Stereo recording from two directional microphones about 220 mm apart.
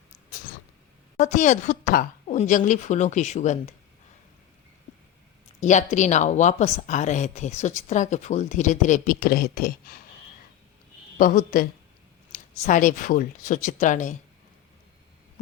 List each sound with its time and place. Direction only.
1.2 s speech: 35° left (ahead or behind)
5.5 s speech: 35° left (ahead or behind)
11.2 s speech: 40° left (ahead or behind)